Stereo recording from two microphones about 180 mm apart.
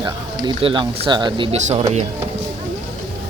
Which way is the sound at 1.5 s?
35° right (ahead or behind).